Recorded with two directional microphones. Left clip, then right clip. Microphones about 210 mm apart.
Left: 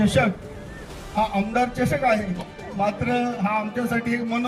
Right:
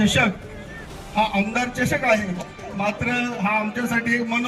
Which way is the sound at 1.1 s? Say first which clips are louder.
Right 1 dB; 50° left (ahead or behind).